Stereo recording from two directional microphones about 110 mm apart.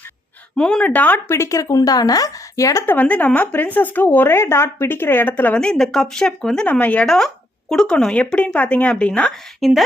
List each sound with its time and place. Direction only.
0.5 s speech: 5° left (ahead or behind); by 2.9 s 30° left (ahead or behind)
2.9 s speech: 15° left (ahead or behind)
5.5 s speech: 5° left (ahead or behind)